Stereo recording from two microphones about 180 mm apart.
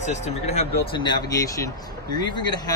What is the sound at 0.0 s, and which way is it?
Speech, 40° left (ahead or behind).